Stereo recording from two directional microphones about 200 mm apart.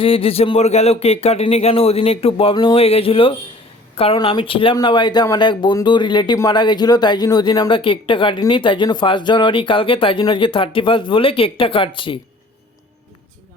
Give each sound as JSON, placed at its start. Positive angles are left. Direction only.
{"t": 0.0, "sound": "speech", "side_deg": 30}